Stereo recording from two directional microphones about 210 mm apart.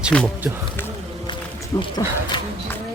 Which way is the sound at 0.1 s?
5° left (ahead or behind).